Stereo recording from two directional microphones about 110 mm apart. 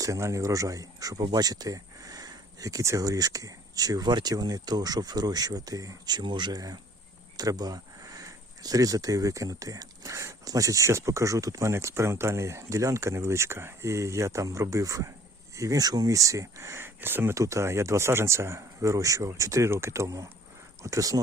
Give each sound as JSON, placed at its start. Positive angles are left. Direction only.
{"t": 0.0, "sound": "speech", "side_deg": -30}